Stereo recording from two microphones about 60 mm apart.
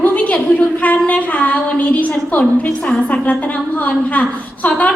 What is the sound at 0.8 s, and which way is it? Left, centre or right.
A woman's voice, left.